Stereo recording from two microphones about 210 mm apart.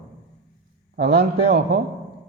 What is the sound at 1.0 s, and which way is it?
Speech, 50° right (ahead or behind).